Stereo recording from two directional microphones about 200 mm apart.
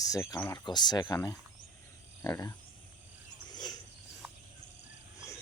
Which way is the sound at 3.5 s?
20° left (ahead or behind).